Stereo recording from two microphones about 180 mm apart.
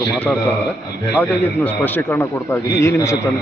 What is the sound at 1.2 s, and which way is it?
A man's voice, 10° left (ahead or behind).